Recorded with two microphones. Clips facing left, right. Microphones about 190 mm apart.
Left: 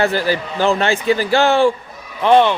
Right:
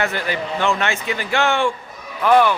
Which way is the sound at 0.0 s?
35° left (ahead or behind).